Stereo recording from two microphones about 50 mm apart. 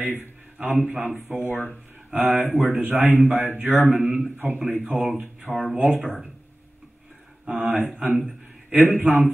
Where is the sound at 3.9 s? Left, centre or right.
Right.